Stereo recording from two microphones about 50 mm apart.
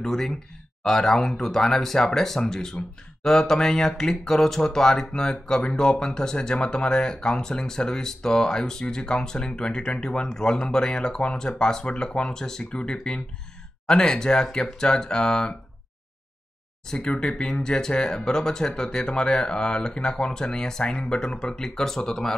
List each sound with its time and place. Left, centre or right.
0.0 s speech: centre
16.8 s speech: centre